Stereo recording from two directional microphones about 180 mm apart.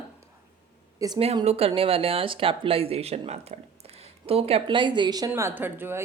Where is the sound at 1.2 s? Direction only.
35° right (ahead or behind).